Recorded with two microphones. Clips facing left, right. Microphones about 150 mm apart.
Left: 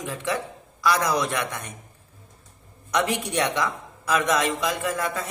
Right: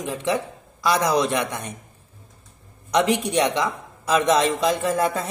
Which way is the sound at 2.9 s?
20° right (ahead or behind).